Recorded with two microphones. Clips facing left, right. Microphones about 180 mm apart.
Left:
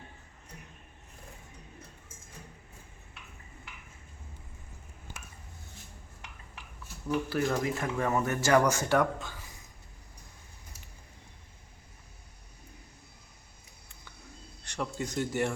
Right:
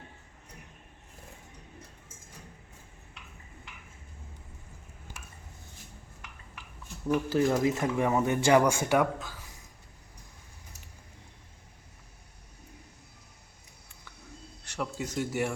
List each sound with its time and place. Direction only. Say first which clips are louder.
7.3 s speech: right 6 dB; 25° right (ahead or behind); by 9.4 s 5° right (ahead or behind)
14.6 s speech: even; 5° right (ahead or behind)